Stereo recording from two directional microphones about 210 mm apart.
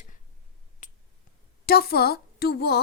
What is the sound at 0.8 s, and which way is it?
Finger snapping, 40° left (ahead or behind).